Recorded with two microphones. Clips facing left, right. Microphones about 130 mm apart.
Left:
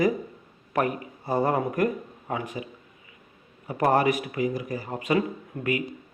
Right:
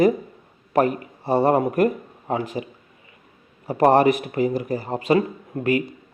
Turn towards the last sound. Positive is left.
turn(degrees=-35)  # may be behind; listen again after turning